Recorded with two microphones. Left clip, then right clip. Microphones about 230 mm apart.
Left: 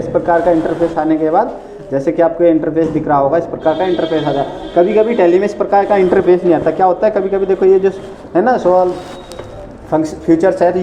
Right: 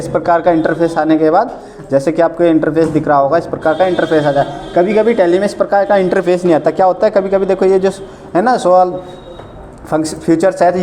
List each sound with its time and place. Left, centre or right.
0.0 s speech: right
9.9 s speech: right